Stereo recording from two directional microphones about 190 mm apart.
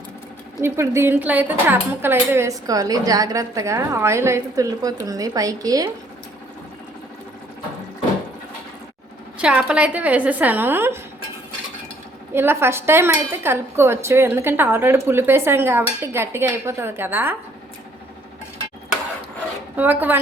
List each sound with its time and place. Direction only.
0.6 s a woman's voice: 15° right (ahead or behind)
9.4 s a woman's voice: 5° right (ahead or behind)
12.3 s a woman's voice: 10° right (ahead or behind)
19.7 s a woman's voice: 10° right (ahead or behind)